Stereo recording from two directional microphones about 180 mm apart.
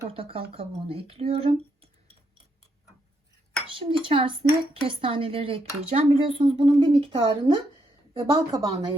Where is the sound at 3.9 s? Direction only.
30° right (ahead or behind).